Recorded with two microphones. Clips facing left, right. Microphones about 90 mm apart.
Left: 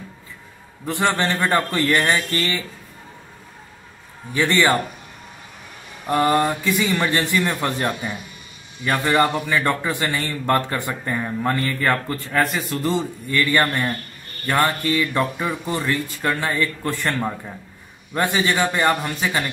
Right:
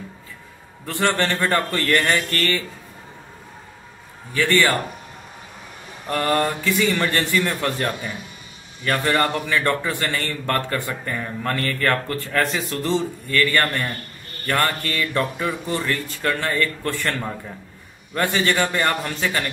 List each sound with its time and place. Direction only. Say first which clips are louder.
0.8 s a man's voice: left 1 dB; 15° left (ahead or behind)
4.3 s a man's voice: left 1 dB; 20° left (ahead or behind)
6.0 s a man's voice: left 3 dB; 15° left (ahead or behind)
13.3 s a man's voice: left 1 dB; 15° left (ahead or behind)
18.1 s a man's voice: even; 15° left (ahead or behind)